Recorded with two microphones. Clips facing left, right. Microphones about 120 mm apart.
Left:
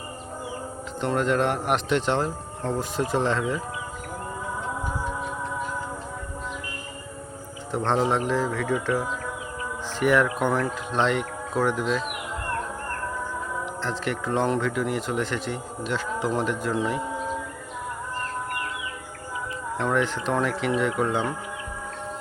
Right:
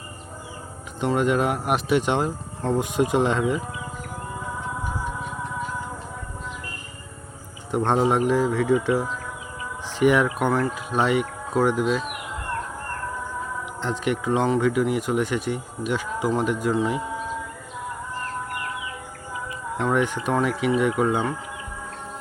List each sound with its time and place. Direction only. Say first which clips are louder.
1.0 s speech: right 2 dB; 10° right (ahead or behind)
7.7 s speech: right 3 dB; 10° right (ahead or behind)
13.8 s speech: right 6 dB; 15° right (ahead or behind)
19.7 s speech: right 2 dB; 15° right (ahead or behind)